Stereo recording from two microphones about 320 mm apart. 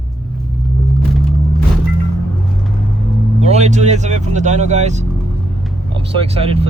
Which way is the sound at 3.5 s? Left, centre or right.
Right.